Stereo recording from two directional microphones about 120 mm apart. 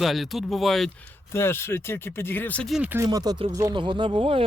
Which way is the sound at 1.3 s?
20° left (ahead or behind).